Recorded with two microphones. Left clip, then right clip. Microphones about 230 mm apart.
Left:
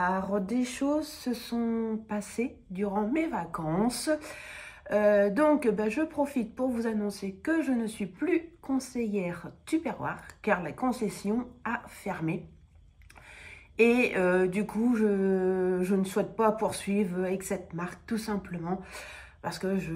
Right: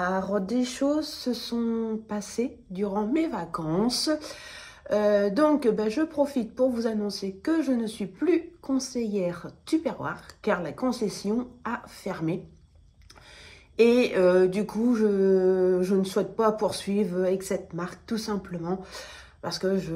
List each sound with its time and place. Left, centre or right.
0.0 s a woman's voice: centre
13.9 s a woman's voice: centre